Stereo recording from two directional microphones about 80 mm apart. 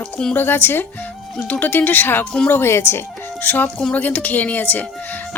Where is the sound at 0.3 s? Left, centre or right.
Left.